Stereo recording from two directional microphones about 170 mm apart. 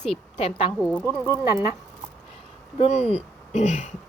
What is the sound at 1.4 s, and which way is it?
Speech, 20° right (ahead or behind).